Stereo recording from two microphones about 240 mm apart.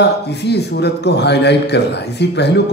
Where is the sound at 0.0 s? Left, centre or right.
Left.